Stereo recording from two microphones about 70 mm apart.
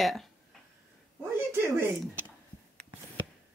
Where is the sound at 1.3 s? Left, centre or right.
Right.